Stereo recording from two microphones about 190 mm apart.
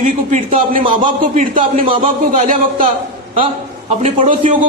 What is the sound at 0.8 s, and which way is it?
A man's voice, 25° right (ahead or behind).